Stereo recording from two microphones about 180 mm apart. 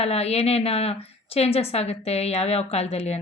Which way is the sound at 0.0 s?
35° left (ahead or behind).